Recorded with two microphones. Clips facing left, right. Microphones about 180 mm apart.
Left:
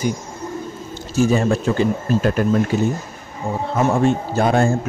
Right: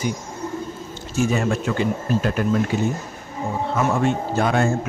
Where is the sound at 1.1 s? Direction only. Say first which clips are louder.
Left 4 dB; 35° left (ahead or behind).